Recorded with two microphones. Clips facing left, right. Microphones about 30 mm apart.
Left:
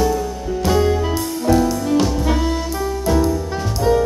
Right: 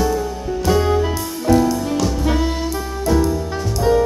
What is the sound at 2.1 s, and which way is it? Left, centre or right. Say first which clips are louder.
Saxophone: even; centre.